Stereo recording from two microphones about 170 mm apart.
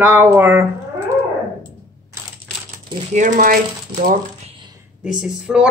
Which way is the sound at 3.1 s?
50° right (ahead or behind).